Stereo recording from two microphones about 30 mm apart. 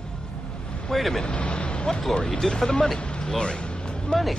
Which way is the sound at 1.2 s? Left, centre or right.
Left.